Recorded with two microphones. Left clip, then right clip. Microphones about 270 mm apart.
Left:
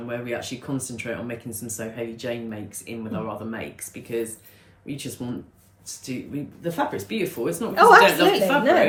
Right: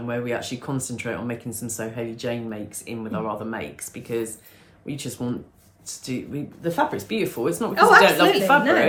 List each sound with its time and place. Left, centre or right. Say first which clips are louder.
0.1 s speech: right 3 dB; centre
7.8 s a woman's voice: left 1 dB; centre